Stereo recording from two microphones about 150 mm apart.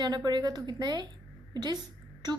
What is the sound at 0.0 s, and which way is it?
A woman's voice, 30° right (ahead or behind).